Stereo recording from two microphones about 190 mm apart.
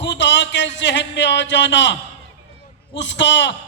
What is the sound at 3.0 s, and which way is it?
Speech, 70° left (ahead or behind).